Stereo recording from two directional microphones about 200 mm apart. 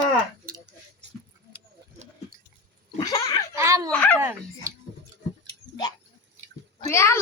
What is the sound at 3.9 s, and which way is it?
Speech, 5° left (ahead or behind).